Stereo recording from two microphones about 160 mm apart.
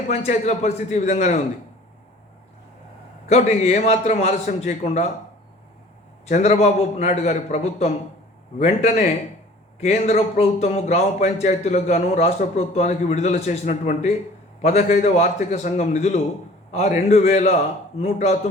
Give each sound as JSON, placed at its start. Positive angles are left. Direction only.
{"t": 0.1, "sound": "a man's voice", "side_deg": 45}
{"t": 3.2, "sound": "a man's voice", "side_deg": 40}
{"t": 6.2, "sound": "a man's voice", "side_deg": 45}